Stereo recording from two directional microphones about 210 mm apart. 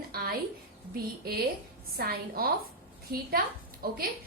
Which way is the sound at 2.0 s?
45° right (ahead or behind).